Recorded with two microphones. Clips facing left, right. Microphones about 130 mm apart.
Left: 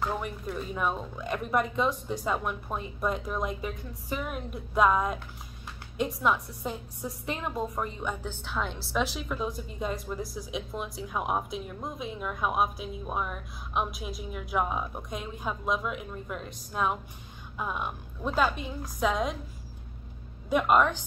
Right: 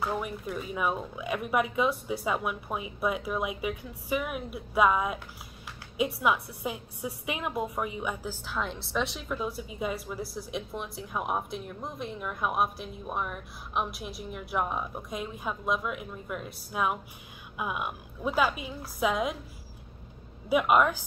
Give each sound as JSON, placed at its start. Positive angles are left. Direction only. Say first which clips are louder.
{"t": 0.0, "sound": "a woman's voice", "louder": "even", "side_deg": -5}
{"t": 20.4, "sound": "speech", "louder": "even", "side_deg": -5}